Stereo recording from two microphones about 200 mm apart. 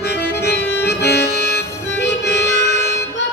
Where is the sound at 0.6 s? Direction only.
10° left (ahead or behind).